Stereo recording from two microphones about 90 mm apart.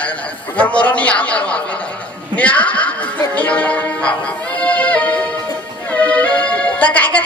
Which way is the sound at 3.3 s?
15° left (ahead or behind).